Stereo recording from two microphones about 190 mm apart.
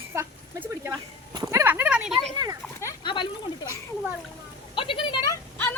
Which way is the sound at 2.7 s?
20° left (ahead or behind).